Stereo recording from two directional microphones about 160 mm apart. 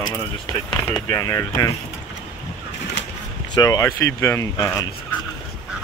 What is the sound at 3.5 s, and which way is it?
Speech, 25° left (ahead or behind).